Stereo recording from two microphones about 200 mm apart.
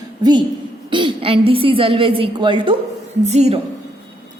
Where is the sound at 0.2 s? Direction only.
20° right (ahead or behind).